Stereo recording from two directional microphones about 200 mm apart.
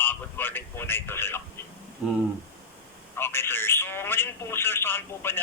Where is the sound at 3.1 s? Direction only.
10° left (ahead or behind).